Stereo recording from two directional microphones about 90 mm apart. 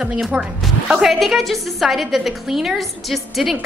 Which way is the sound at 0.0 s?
10° right (ahead or behind).